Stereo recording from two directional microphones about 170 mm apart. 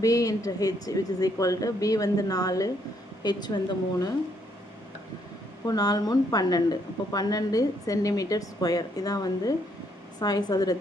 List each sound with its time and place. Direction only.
0.0 s a woman's voice: 20° left (ahead or behind)
5.6 s a woman's voice: 20° left (ahead or behind)